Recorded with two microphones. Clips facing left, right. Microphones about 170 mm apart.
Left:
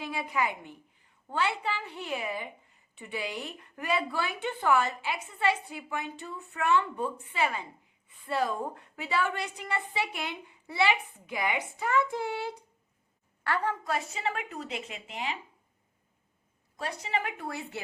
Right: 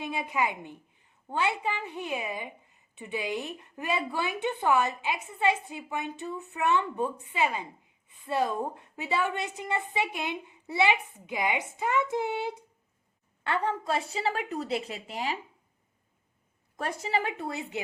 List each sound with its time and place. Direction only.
0.0 s a woman's voice: 20° right (ahead or behind); by 15.4 s 40° right (ahead or behind)
16.7 s a woman's voice: 50° right (ahead or behind)
17.1 s a woman's voice: 30° right (ahead or behind)